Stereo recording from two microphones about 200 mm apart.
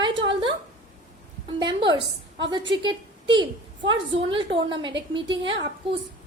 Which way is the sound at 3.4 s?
25° right (ahead or behind).